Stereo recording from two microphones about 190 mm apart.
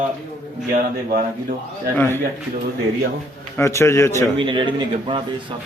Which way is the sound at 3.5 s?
15° left (ahead or behind).